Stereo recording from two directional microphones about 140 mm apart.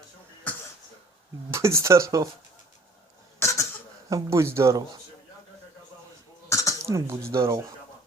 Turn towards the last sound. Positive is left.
turn(degrees=-25)  # may be behind; listen again after turning